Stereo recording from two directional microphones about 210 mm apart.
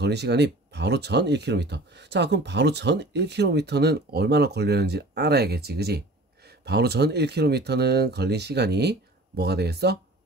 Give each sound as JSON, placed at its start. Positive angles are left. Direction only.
{"t": 0.0, "sound": "speech", "side_deg": -55}